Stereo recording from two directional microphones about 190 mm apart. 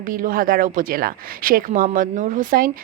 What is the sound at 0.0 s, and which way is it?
Speech, 45° right (ahead or behind).